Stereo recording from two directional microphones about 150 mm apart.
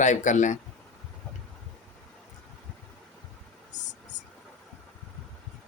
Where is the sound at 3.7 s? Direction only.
55° left (ahead or behind).